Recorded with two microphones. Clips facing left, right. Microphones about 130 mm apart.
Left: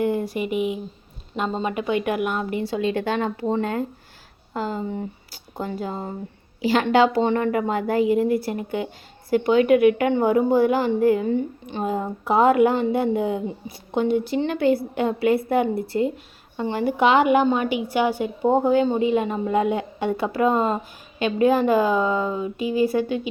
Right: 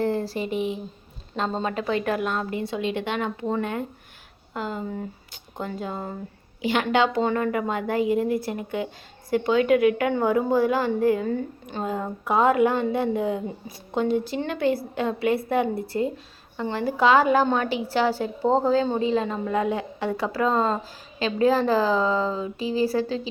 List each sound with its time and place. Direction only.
0.0 s a woman's voice: 15° left (ahead or behind)
2.6 s a woman's voice: 30° left (ahead or behind)